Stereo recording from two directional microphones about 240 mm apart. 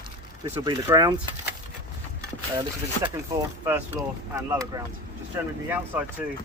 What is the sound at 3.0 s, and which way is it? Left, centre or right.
Speech, centre.